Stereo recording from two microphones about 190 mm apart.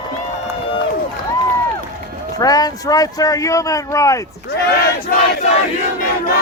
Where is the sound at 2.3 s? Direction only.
20° left (ahead or behind).